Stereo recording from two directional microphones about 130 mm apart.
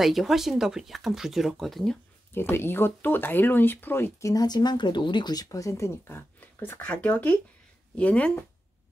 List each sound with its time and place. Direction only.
0.0 s speech: centre (ahead or behind)
2.3 s speech: 15° left (ahead or behind)